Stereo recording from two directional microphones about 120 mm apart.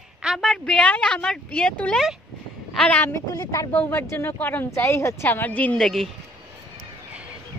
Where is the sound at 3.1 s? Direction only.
30° left (ahead or behind); by 6.0 s 5° left (ahead or behind).